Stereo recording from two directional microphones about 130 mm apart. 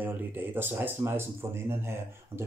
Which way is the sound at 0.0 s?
15° right (ahead or behind).